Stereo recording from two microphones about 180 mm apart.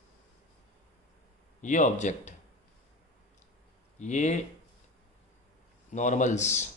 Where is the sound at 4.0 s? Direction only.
40° left (ahead or behind).